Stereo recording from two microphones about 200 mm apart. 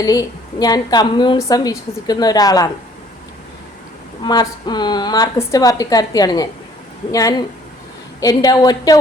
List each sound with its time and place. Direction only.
0.0 s a woman's voice: 20° left (ahead or behind)
4.2 s a woman's voice: 20° left (ahead or behind)